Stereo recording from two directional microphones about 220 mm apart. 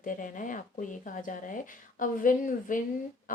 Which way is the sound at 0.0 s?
35° left (ahead or behind).